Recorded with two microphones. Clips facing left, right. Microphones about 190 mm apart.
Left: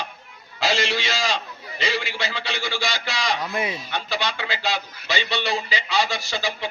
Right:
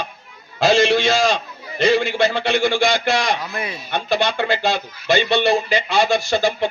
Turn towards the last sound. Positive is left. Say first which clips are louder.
# right 9 dB
turn(degrees=-55)  # may be behind; listen again after turning